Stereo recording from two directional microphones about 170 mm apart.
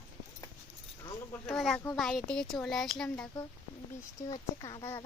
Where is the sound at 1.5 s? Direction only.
Centre (ahead or behind).